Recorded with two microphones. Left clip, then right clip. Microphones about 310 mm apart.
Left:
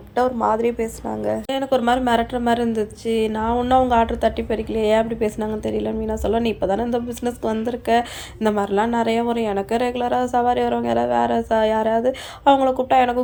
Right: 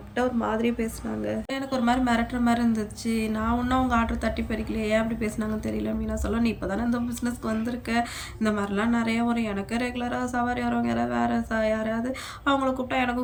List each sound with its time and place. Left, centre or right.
0.2 s a woman's voice: centre